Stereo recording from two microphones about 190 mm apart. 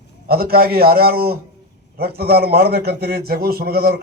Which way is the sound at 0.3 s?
55° right (ahead or behind).